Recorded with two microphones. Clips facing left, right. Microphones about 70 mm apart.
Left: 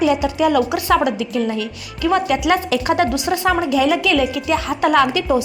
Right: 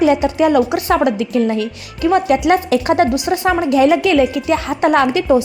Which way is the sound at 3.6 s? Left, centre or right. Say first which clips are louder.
Right 4 dB; right.